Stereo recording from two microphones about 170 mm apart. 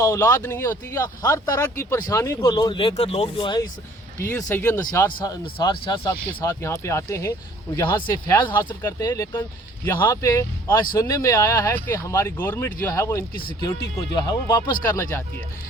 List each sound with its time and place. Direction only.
0.0 s speech: 15° left (ahead or behind)
4.2 s speech: 15° left (ahead or behind)
5.1 s speech: 25° left (ahead or behind)
6.4 s speech: 15° left (ahead or behind)
8.4 s speech: 15° left (ahead or behind)